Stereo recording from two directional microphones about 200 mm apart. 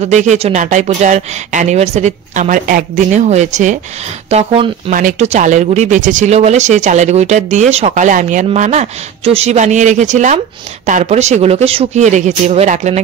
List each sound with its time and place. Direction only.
0.0 s speech: 35° right (ahead or behind)